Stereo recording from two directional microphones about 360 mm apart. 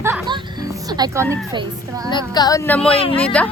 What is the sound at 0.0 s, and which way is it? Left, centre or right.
Music, centre.